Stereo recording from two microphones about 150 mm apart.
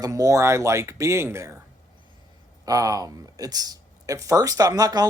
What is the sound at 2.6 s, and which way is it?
Speech, 25° right (ahead or behind).